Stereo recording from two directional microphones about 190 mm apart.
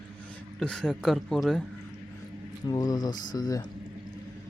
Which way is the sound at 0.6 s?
5° left (ahead or behind).